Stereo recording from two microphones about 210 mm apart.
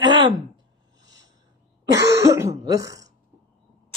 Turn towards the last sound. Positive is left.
turn(degrees=-15)  # may be behind; listen again after turning